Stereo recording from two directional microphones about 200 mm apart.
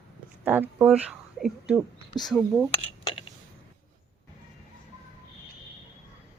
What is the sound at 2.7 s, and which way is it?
Dishes, 25° left (ahead or behind).